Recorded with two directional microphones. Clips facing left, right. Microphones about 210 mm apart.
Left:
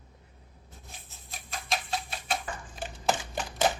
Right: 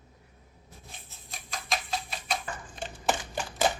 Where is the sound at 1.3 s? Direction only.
Centre (ahead or behind).